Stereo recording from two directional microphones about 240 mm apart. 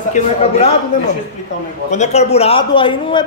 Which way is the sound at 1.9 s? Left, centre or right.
Left.